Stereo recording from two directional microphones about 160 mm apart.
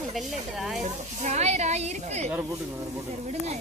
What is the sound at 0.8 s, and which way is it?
A woman's voice, 45° right (ahead or behind).